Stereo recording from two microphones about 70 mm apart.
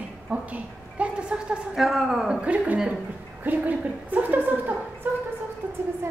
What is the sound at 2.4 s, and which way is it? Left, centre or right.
A woman's voice, centre.